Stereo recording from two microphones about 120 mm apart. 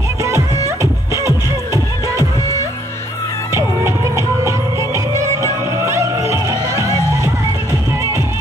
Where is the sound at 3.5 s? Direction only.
25° right (ahead or behind).